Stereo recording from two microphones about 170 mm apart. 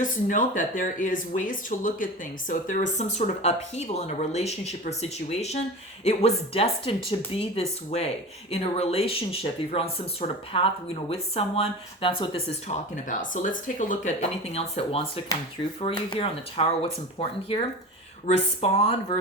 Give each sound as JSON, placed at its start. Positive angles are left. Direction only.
{"t": 0.0, "sound": "speech", "side_deg": 50}